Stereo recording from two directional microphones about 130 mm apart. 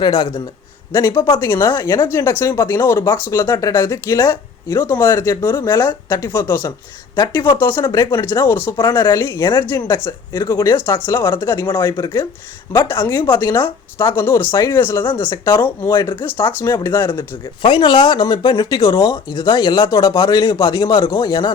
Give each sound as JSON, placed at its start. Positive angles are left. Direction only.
{"t": 0.0, "sound": "speech", "side_deg": 35}
{"t": 0.9, "sound": "speech", "side_deg": 20}
{"t": 7.9, "sound": "speech", "side_deg": 35}
{"t": 8.2, "sound": "speech", "side_deg": 20}
{"t": 17.6, "sound": "speech", "side_deg": 40}